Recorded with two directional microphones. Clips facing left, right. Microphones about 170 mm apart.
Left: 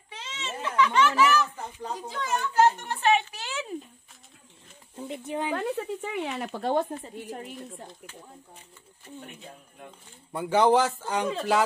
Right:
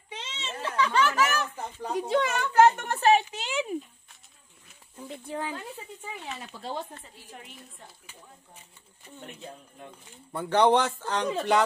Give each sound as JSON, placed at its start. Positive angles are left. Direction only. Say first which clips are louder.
{"t": 0.1, "sound": "a sound", "louder": "left 1 dB", "side_deg": -25}
{"t": 2.0, "sound": "a woman's voice", "louder": "right 6 dB", "side_deg": -70}
{"t": 3.3, "sound": "a sound", "louder": "right 4 dB", "side_deg": -15}
{"t": 4.9, "sound": "speech", "louder": "left 3 dB", "side_deg": 20}
{"t": 5.5, "sound": "speech", "louder": "left 10 dB", "side_deg": 70}
{"t": 10.3, "sound": "speech", "louder": "left 1 dB", "side_deg": 10}